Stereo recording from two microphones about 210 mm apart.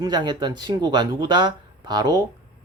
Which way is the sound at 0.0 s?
20° right (ahead or behind).